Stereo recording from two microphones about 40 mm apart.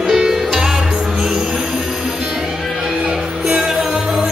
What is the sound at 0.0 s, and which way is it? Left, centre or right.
Music, centre.